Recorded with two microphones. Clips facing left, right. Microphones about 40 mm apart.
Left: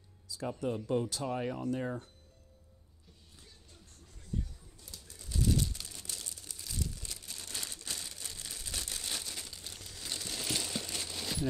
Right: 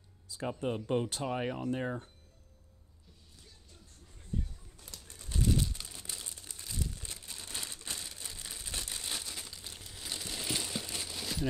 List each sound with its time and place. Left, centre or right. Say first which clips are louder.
0.5 s speech: even; right
5.1 s bird: even; right
5.5 s crumpling: even; centre
7.3 s crumpling: even; centre